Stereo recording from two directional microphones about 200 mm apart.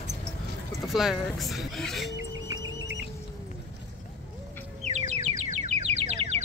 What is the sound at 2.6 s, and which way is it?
Music, 65° right (ahead or behind).